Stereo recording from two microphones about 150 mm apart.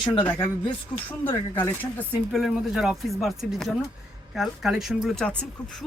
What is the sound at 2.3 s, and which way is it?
Speech, centre (ahead or behind).